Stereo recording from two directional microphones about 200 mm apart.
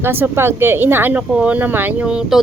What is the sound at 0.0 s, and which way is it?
Speech, 10° right (ahead or behind).